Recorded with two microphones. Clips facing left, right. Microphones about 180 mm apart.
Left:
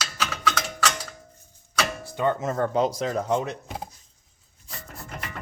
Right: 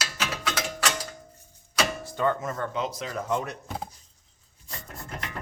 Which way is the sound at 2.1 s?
20° left (ahead or behind).